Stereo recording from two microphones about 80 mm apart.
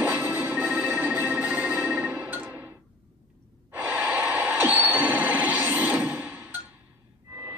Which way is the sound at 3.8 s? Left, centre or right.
Right.